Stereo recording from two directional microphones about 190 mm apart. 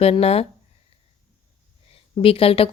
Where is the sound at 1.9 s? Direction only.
30° left (ahead or behind).